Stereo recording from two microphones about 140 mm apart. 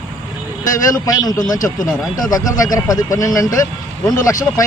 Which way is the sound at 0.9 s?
25° left (ahead or behind).